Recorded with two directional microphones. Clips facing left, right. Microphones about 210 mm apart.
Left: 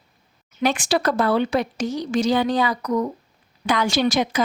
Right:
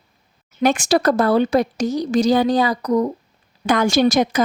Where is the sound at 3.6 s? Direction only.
45° right (ahead or behind).